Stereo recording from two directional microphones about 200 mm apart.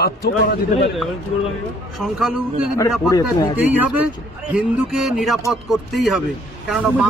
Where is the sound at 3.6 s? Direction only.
10° right (ahead or behind).